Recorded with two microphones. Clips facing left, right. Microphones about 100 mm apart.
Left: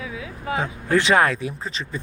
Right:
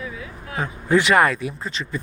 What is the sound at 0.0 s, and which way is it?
Vehicle, 90° left.